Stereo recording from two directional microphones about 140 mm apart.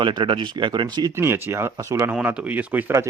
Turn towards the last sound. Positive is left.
turn(degrees=-15)  # may be behind; listen again after turning